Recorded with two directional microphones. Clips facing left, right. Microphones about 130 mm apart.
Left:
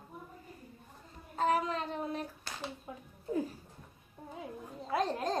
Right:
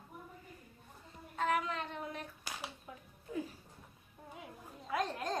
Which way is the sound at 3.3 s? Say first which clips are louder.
Left 6 dB; 35° left (ahead or behind).